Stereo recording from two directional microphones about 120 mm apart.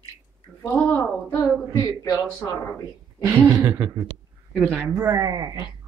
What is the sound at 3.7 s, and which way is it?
Speech, 25° right (ahead or behind).